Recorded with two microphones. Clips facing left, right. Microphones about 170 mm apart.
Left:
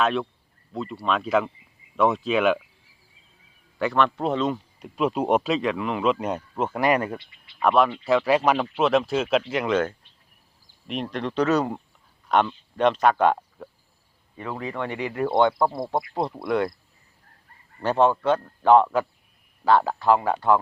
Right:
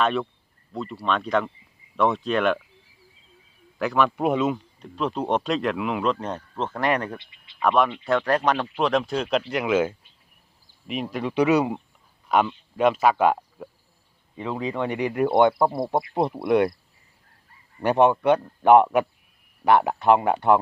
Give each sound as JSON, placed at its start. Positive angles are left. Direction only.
{"t": 0.0, "sound": "speech", "side_deg": 0}
{"t": 3.8, "sound": "speech", "side_deg": -5}
{"t": 4.5, "sound": "speech", "side_deg": 10}
{"t": 14.3, "sound": "speech", "side_deg": -15}
{"t": 15.9, "sound": "speech", "side_deg": -20}
{"t": 17.7, "sound": "speech", "side_deg": -15}